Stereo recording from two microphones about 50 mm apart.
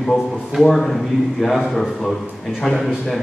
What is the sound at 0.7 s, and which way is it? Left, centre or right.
A man's voice, centre.